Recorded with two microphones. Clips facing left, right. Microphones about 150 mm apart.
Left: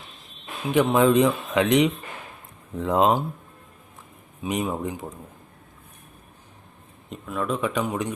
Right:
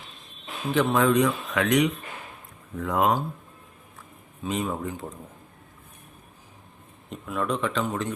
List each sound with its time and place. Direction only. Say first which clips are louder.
0.7 s speech: left 3 dB; 15° left (ahead or behind)
4.4 s speech: left 2 dB; 15° left (ahead or behind)
7.1 s speech: left 1 dB; centre (ahead or behind)